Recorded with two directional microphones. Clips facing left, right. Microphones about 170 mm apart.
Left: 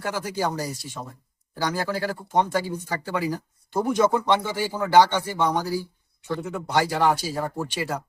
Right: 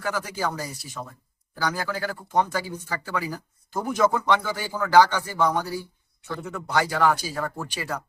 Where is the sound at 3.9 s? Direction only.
25° left (ahead or behind).